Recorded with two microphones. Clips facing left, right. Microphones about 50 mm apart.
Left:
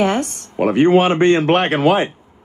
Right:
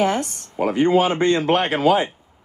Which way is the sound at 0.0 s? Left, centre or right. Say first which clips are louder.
Left 3 dB; left.